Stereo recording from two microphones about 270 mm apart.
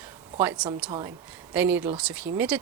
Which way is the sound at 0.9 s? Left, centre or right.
Centre.